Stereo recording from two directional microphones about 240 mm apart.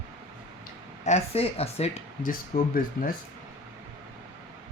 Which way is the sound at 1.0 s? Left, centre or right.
Left.